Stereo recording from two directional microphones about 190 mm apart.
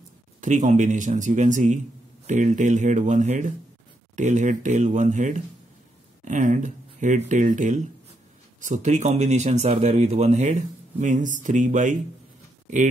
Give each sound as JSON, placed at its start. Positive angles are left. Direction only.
{"t": 0.4, "sound": "speech", "side_deg": -40}